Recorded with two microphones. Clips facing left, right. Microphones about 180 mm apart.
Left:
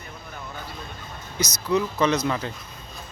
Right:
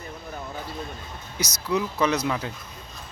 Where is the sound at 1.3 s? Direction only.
10° right (ahead or behind).